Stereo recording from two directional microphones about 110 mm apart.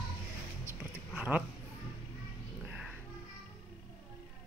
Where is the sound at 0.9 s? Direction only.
15° right (ahead or behind).